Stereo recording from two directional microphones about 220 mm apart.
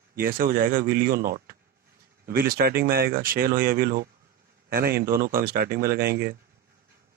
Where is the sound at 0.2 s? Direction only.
40° right (ahead or behind).